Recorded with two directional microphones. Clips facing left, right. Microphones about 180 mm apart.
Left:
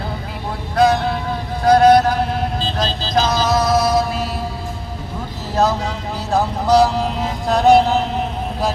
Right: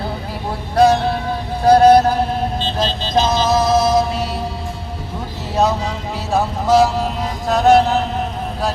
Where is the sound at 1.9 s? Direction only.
30° right (ahead or behind).